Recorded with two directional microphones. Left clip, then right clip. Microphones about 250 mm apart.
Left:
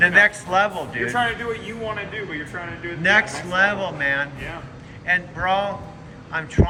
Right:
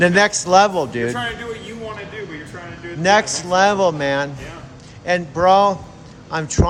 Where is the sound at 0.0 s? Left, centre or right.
Centre.